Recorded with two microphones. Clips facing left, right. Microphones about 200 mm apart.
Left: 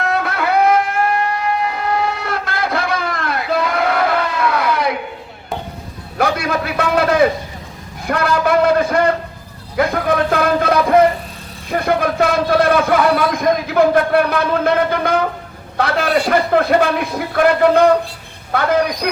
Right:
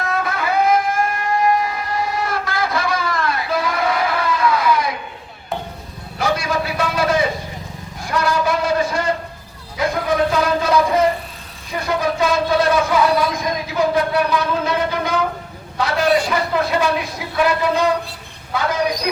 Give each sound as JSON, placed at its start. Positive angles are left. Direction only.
{"t": 0.0, "sound": "music", "side_deg": 65}
{"t": 1.6, "sound": "train", "side_deg": 65}
{"t": 6.1, "sound": "a sound", "side_deg": 60}
{"t": 9.7, "sound": "a man's voice", "side_deg": 60}